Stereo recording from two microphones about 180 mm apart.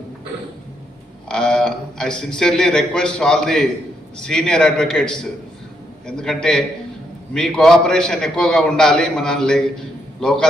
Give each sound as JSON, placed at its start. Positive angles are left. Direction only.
{"t": 1.3, "sound": "a man's voice", "side_deg": 5}